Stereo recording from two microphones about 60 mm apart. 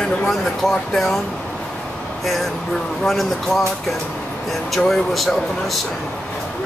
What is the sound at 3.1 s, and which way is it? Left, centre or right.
Speech, centre.